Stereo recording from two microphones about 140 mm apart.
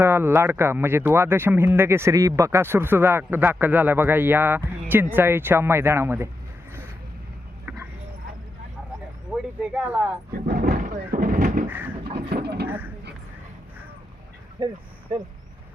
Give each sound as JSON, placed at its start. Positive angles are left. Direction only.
{"t": 0.0, "sound": "speech", "side_deg": -15}
{"t": 7.6, "sound": "a sound", "side_deg": -10}
{"t": 9.6, "sound": "speech", "side_deg": -10}
{"t": 10.4, "sound": "speech", "side_deg": -80}
{"t": 11.7, "sound": "a sound", "side_deg": -15}
{"t": 14.6, "sound": "speech", "side_deg": -35}